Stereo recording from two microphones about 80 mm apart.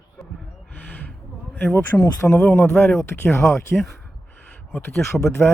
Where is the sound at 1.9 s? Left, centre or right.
Left.